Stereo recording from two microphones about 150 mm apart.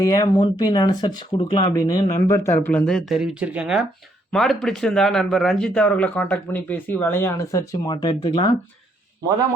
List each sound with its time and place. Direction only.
0.0 s speech: 25° left (ahead or behind)
2.6 s speech: 5° left (ahead or behind); by 8.4 s 30° left (ahead or behind)